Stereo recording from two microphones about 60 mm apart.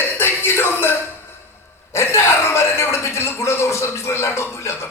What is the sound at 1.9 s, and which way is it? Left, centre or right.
A man's voice, left.